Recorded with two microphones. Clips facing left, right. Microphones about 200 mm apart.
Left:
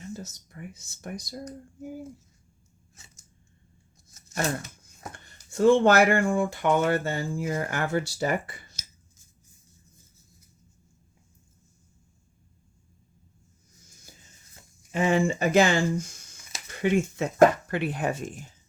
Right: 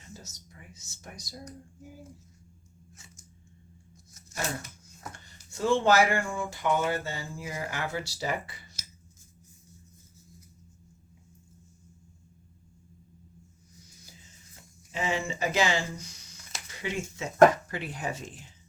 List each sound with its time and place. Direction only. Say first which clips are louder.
0.1 s speech: left 10 dB; 60° left (ahead or behind)
5.1 s speech: left 11 dB; 55° left (ahead or behind)
13.8 s music: right 3 dB; 45° left (ahead or behind)
14.9 s speech: left 8 dB; 55° left (ahead or behind)